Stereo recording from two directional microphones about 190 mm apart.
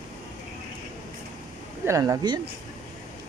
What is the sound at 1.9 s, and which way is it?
Speech, 15° right (ahead or behind).